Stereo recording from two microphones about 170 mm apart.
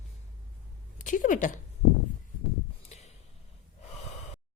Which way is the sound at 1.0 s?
50° left (ahead or behind).